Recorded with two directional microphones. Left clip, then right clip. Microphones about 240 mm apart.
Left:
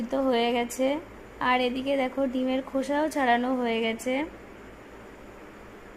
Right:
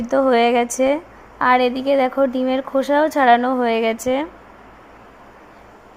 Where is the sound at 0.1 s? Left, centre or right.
Right.